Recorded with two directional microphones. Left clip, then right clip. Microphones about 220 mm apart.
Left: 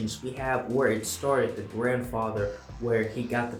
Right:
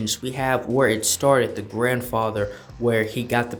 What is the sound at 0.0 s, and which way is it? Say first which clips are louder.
Speech: right 7 dB; 50° right (ahead or behind).